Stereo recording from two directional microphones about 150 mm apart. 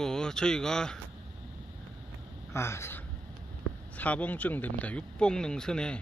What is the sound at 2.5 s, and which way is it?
Speech, 15° left (ahead or behind).